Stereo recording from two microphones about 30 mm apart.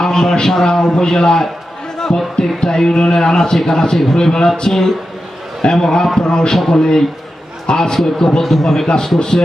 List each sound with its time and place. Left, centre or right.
0.0 s speech: left
5.7 s a man's voice: centre
7.7 s speech: left
8.2 s a man's voice: centre